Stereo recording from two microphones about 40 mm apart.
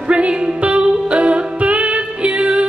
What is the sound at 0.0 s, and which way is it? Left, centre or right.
Music, right.